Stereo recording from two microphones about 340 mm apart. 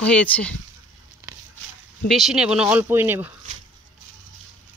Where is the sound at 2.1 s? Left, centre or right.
Centre.